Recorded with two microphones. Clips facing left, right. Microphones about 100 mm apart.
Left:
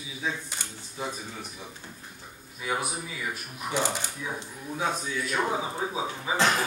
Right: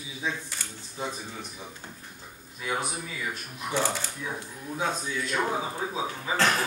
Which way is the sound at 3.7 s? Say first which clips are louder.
Even; 20° left (ahead or behind).